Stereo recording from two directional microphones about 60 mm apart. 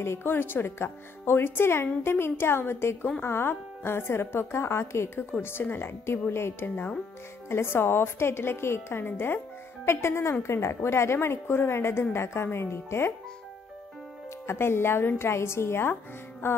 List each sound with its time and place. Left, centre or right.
0.0 s a woman's voice: left
14.5 s a woman's voice: left